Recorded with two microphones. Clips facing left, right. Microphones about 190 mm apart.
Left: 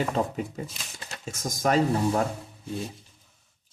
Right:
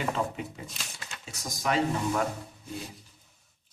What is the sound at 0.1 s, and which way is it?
Speech, 40° left (ahead or behind).